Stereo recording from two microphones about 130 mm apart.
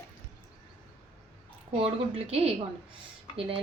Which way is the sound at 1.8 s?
45° right (ahead or behind).